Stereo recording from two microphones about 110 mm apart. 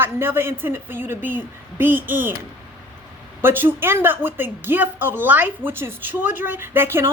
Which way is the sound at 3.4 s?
20° right (ahead or behind).